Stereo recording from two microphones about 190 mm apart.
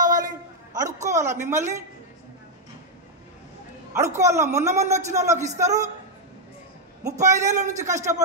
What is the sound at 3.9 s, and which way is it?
Speech, 15° right (ahead or behind).